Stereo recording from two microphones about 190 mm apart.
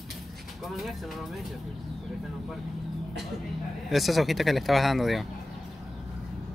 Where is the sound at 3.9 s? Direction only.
Centre (ahead or behind).